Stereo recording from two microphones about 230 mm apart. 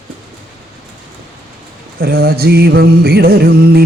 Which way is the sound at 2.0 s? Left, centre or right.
Right.